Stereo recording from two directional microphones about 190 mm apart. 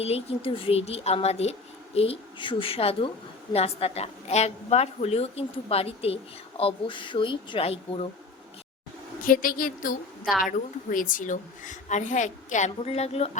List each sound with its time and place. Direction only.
0.0 s a woman's voice: 30° left (ahead or behind)
9.2 s a woman's voice: 45° left (ahead or behind)
10.2 s a woman's voice: centre (ahead or behind)
10.8 s a woman's voice: 45° left (ahead or behind)